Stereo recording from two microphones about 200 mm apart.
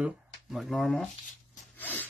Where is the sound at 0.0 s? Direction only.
Centre (ahead or behind).